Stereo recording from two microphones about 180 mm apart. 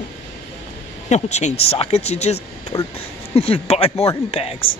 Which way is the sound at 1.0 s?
40° left (ahead or behind).